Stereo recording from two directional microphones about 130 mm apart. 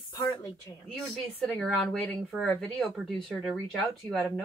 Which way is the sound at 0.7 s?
20° left (ahead or behind).